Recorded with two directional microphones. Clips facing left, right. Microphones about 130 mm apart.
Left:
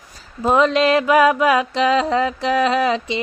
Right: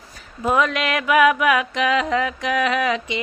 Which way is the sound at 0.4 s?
30° left (ahead or behind).